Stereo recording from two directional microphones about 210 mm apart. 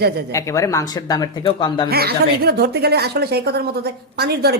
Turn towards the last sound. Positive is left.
turn(degrees=-50)  # may be behind; listen again after turning